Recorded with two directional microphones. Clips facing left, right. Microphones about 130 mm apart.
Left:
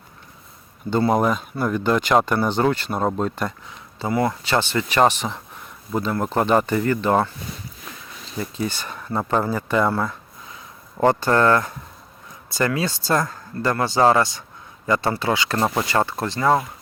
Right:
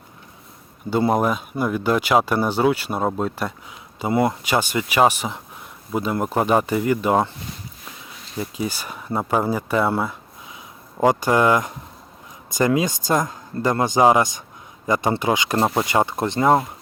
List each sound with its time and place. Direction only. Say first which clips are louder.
1.1 s speech: even; 5° right (ahead or behind)
8.4 s speech: even; 10° right (ahead or behind)